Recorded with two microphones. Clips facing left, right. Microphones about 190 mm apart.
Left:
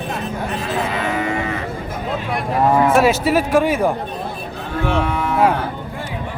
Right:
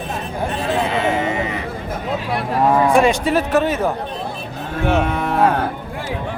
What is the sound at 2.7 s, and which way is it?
Speech, 5° left (ahead or behind).